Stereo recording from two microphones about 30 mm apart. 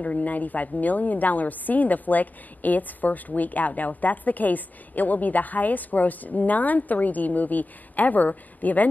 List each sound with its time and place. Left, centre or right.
0.0 s a woman's voice: left